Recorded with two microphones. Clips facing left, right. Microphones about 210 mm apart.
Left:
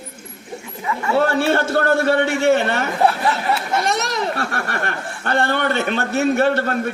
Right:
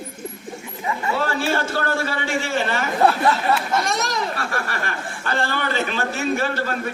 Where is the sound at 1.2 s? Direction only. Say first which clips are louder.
Left 8 dB; 65° left (ahead or behind).